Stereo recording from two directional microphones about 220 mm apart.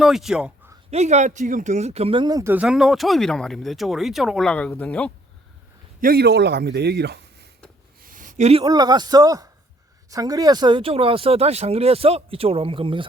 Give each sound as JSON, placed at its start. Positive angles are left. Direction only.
{"t": 0.0, "sound": "speech", "side_deg": 0}
{"t": 0.9, "sound": "speech", "side_deg": -30}
{"t": 6.0, "sound": "a man's voice", "side_deg": -45}
{"t": 8.0, "sound": "a sound", "side_deg": -35}
{"t": 8.6, "sound": "a man's voice", "side_deg": -20}